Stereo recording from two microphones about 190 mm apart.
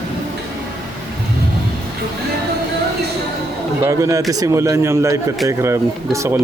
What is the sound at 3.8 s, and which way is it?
Speech, 15° right (ahead or behind).